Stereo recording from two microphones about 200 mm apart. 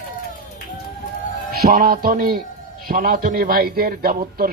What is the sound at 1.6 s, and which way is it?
A man's voice, 50° right (ahead or behind).